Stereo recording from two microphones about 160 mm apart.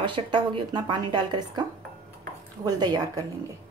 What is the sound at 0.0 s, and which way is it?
Speech, 30° right (ahead or behind).